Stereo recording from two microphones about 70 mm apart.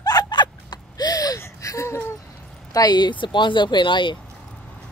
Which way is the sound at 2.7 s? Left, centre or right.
Left.